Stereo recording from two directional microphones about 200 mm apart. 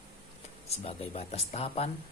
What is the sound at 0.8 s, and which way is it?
Speech, 30° left (ahead or behind).